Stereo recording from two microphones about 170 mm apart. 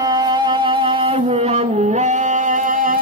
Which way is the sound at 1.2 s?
40° right (ahead or behind).